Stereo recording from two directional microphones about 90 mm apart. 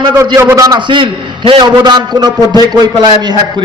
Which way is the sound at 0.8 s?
60° right (ahead or behind).